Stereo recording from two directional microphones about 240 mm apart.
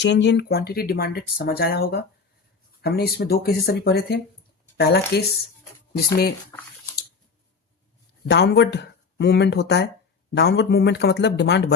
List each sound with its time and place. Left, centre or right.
0.0 s speech: left
8.3 s speech: left